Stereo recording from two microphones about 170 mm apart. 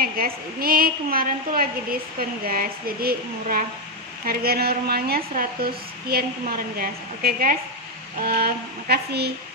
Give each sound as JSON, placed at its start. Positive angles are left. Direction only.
{"t": 0.0, "sound": "a woman's voice", "side_deg": -60}